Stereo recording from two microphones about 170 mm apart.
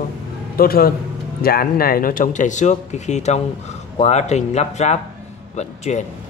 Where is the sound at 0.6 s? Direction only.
60° left (ahead or behind); by 6.0 s 40° left (ahead or behind).